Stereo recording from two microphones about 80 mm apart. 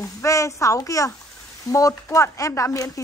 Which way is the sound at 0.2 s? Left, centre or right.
Left.